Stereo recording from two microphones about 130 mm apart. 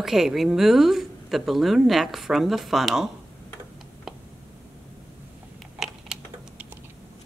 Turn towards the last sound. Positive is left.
turn(degrees=-5)  # may be behind; listen again after turning